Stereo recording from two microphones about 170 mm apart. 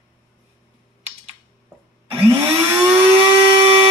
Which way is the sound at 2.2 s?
20° right (ahead or behind).